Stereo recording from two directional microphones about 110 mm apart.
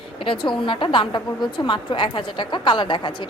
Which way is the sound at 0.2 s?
50° left (ahead or behind).